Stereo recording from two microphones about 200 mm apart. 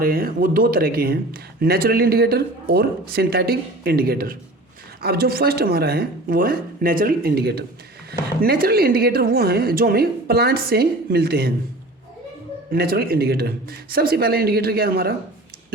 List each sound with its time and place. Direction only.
0.0 s speech: 45° right (ahead or behind)
12.7 s speech: 50° right (ahead or behind)